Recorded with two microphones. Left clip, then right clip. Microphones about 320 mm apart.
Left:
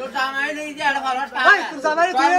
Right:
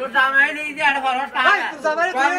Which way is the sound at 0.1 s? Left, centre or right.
Centre.